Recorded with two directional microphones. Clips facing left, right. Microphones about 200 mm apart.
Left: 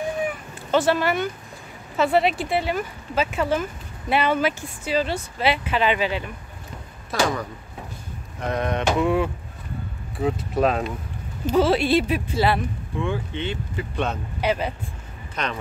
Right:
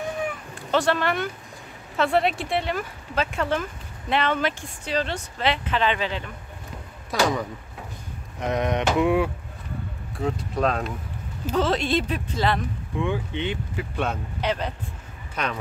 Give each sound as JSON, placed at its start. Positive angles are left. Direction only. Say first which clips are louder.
{"t": 0.7, "sound": "speech", "louder": "left 2 dB", "side_deg": 5}
{"t": 7.1, "sound": "speech", "louder": "even", "side_deg": -15}
{"t": 10.1, "sound": "speech", "louder": "left 3 dB", "side_deg": 5}
{"t": 13.0, "sound": "speech", "louder": "right 1 dB", "side_deg": -15}
{"t": 14.4, "sound": "speech", "louder": "left 3 dB", "side_deg": 10}
{"t": 15.4, "sound": "speech", "louder": "even", "side_deg": -10}